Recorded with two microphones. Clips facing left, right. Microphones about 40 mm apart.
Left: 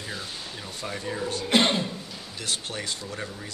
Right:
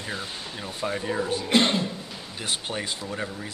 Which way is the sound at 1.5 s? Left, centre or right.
Centre.